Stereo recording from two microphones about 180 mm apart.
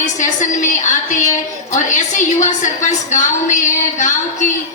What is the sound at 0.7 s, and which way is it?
A woman's voice, 45° left (ahead or behind).